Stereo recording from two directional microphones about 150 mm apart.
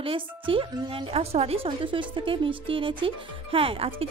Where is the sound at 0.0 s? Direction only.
35° right (ahead or behind).